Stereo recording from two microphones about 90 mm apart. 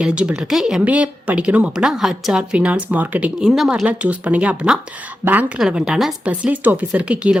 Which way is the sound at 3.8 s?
15° right (ahead or behind).